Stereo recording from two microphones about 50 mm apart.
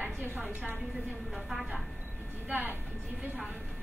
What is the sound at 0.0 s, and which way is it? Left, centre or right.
Speech, right.